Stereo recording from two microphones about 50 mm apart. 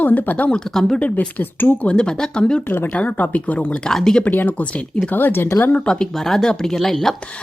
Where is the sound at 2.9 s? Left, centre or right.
Left.